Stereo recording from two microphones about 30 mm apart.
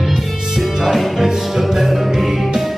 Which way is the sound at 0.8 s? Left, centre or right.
Centre.